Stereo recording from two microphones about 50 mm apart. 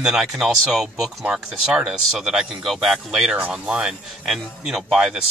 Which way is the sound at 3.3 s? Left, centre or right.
Right.